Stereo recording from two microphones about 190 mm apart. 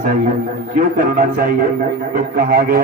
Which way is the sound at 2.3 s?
50° right (ahead or behind).